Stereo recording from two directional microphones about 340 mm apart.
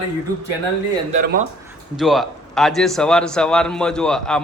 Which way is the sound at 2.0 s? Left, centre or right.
Centre.